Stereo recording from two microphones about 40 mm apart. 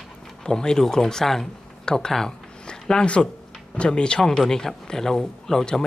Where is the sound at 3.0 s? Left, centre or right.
Left; by 5.7 s centre.